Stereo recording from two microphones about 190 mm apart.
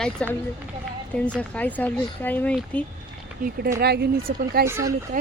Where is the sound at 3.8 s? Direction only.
60° right (ahead or behind).